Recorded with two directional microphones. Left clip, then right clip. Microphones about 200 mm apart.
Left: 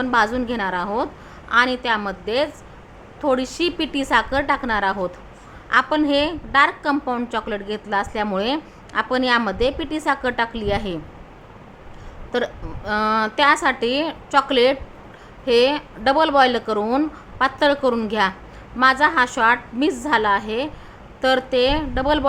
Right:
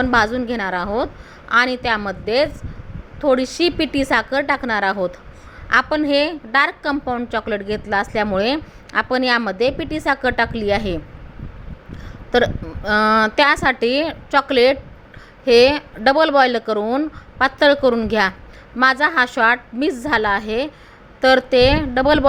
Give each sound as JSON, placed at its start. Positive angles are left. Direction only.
{"t": 0.0, "sound": "a woman's voice", "side_deg": -20}
{"t": 12.3, "sound": "a woman's voice", "side_deg": -20}